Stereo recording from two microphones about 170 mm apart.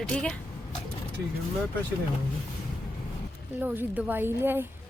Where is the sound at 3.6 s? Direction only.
10° right (ahead or behind).